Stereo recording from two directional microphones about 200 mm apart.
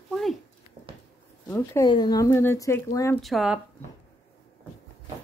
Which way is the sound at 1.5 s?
15° left (ahead or behind).